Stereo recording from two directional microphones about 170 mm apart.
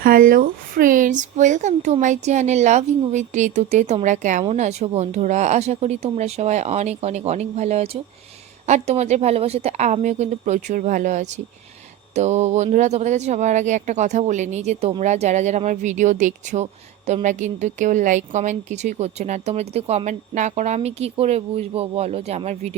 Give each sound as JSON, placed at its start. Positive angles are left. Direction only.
{"t": 0.0, "sound": "a woman's voice", "side_deg": -55}